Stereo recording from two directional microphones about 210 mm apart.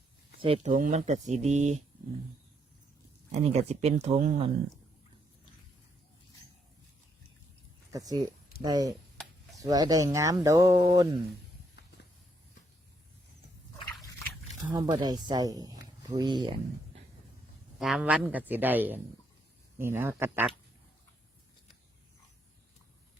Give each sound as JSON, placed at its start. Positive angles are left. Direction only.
{"t": 0.3, "sound": "speech", "side_deg": -25}
{"t": 0.7, "sound": "speech", "side_deg": -35}
{"t": 3.3, "sound": "speech", "side_deg": -30}
{"t": 7.9, "sound": "speech", "side_deg": -15}
{"t": 14.8, "sound": "speech", "side_deg": -20}
{"t": 17.7, "sound": "speech", "side_deg": 0}